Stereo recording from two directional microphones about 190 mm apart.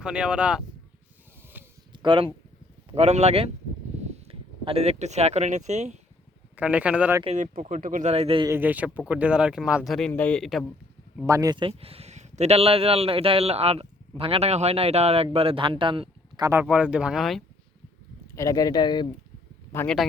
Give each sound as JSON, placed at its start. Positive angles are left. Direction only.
{"t": 0.0, "sound": "speech", "side_deg": -5}
{"t": 1.5, "sound": "a sound", "side_deg": -10}
{"t": 1.9, "sound": "a sound", "side_deg": -25}
{"t": 2.9, "sound": "speech", "side_deg": -35}
{"t": 6.6, "sound": "speech", "side_deg": -5}
{"t": 7.3, "sound": "speech", "side_deg": -40}
{"t": 8.4, "sound": "speech", "side_deg": -10}
{"t": 11.3, "sound": "speech", "side_deg": -20}
{"t": 16.5, "sound": "speech", "side_deg": -10}
{"t": 18.3, "sound": "speech", "side_deg": 20}
{"t": 19.7, "sound": "speech", "side_deg": 10}